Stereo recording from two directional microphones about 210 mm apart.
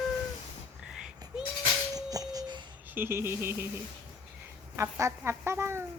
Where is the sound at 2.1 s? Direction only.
15° right (ahead or behind).